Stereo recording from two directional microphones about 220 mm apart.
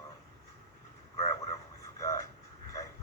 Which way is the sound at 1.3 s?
15° left (ahead or behind).